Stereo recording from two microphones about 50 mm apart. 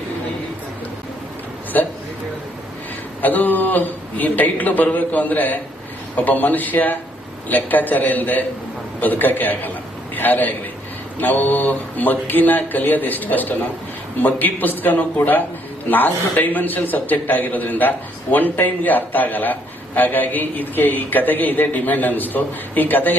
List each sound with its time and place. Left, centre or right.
1.7 s a man's voice: left
3.2 s a man's voice: left